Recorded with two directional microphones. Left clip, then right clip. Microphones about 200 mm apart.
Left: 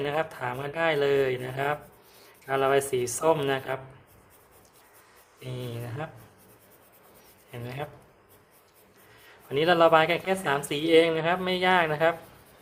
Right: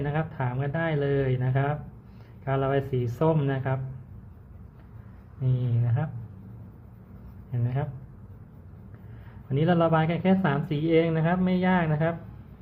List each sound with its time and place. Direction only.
0.0 s speech: 20° left (ahead or behind)
5.5 s speech: 20° left (ahead or behind)
7.5 s speech: 20° left (ahead or behind)
9.5 s speech: 20° left (ahead or behind)